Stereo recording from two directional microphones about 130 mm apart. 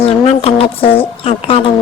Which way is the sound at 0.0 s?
50° left (ahead or behind).